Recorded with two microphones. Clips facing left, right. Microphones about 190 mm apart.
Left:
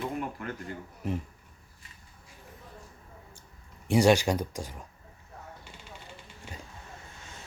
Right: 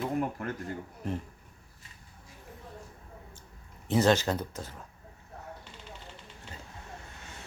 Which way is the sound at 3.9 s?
10° left (ahead or behind).